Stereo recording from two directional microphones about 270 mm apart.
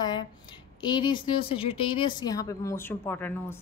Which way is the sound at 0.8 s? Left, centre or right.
Centre.